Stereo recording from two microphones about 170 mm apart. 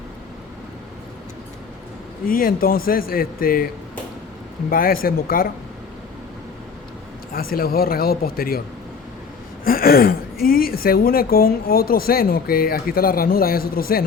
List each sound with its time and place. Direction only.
2.2 s a woman's voice: 60° left (ahead or behind)
4.7 s a woman's voice: 60° left (ahead or behind)
7.3 s a woman's voice: 60° left (ahead or behind)
9.6 s a woman's voice: 60° left (ahead or behind)